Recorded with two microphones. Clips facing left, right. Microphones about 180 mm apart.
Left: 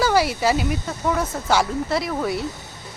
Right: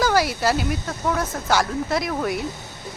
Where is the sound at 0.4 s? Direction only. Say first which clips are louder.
Left 1 dB; centre (ahead or behind).